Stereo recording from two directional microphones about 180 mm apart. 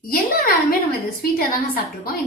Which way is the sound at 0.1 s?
55° left (ahead or behind).